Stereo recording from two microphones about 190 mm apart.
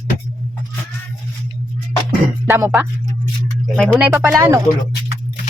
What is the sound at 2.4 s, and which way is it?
Music, 15° right (ahead or behind).